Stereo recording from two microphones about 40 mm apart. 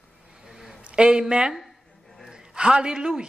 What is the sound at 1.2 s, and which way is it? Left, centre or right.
A woman's voice, right.